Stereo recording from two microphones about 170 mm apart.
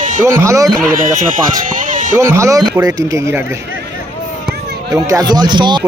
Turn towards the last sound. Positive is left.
turn(degrees=-25)  # may be behind; listen again after turning